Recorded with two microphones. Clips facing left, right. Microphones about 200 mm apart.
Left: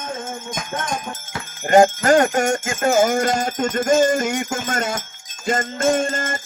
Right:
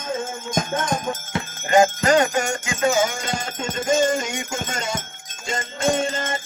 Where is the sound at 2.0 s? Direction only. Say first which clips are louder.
Left 3 dB; 50° left (ahead or behind).